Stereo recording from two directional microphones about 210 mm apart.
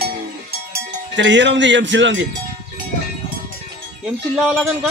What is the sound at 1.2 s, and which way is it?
Speech, 60° right (ahead or behind).